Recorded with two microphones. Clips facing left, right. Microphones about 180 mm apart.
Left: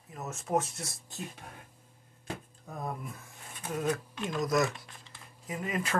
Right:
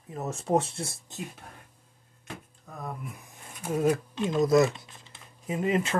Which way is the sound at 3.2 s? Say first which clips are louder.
Right 2 dB; 15° right (ahead or behind).